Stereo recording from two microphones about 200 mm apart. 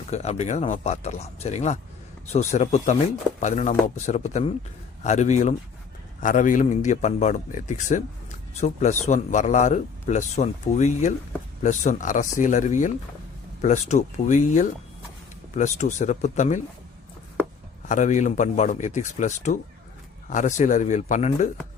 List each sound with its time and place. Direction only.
0.1 s a man's voice: 35° left (ahead or behind)
17.8 s a man's voice: 40° left (ahead or behind)